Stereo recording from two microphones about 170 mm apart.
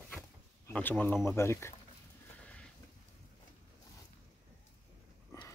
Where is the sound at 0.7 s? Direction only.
10° left (ahead or behind).